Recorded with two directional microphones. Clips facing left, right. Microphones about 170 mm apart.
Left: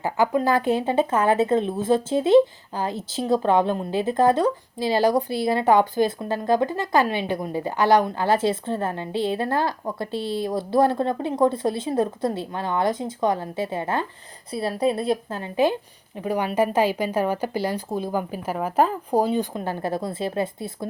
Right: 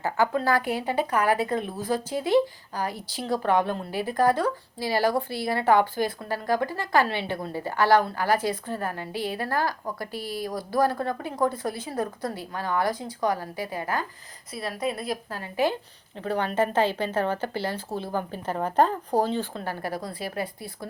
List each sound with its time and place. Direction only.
0.0 s speech: 15° left (ahead or behind)